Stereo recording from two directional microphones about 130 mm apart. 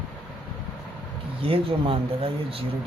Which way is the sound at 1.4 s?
45° right (ahead or behind).